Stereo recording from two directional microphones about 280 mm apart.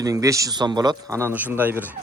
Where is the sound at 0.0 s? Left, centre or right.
Centre.